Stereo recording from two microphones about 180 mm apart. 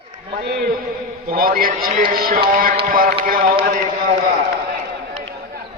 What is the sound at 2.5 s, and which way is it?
Music, 50° right (ahead or behind).